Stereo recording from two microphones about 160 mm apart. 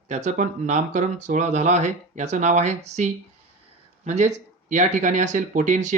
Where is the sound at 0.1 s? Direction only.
50° right (ahead or behind).